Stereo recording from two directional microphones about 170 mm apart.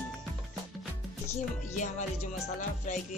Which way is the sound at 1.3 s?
45° left (ahead or behind).